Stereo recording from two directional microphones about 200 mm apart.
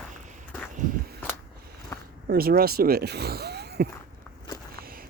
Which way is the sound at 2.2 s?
50° right (ahead or behind).